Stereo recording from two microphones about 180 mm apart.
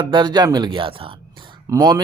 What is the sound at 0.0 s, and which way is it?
A man's voice, 25° right (ahead or behind).